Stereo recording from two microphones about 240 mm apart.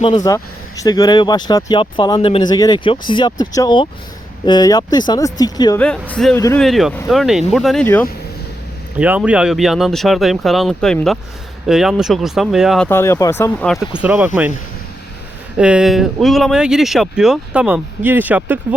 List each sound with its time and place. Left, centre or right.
0.0 s speech: centre
5.8 s speech: centre
9.0 s speech: centre
15.5 s speech: centre